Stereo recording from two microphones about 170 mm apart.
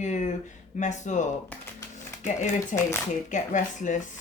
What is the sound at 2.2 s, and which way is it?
Speech, 45° left (ahead or behind).